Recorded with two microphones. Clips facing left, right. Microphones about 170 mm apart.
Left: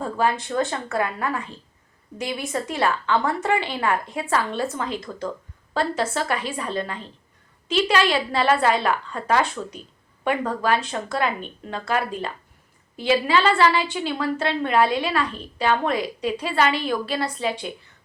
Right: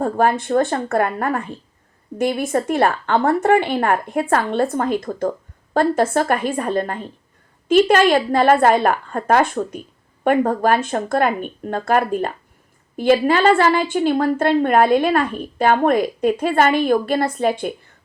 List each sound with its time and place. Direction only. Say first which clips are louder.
0.0 s a woman's voice: right 6 dB; 50° right (ahead or behind)